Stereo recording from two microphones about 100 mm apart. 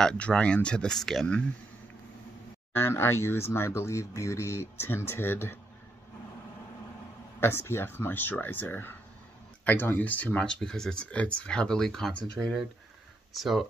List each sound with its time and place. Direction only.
0.0 s speech: 10° left (ahead or behind)
2.7 s speech: 25° left (ahead or behind)
7.3 s speech: 25° left (ahead or behind); by 13.7 s centre (ahead or behind)